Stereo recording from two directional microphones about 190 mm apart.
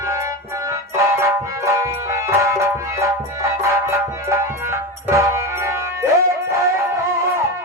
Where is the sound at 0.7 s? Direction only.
15° right (ahead or behind).